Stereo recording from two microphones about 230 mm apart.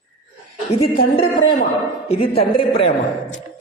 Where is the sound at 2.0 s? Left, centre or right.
Left.